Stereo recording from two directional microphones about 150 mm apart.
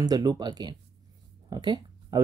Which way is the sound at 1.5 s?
30° right (ahead or behind).